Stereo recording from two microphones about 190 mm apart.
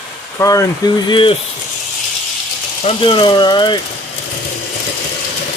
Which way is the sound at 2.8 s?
25° left (ahead or behind).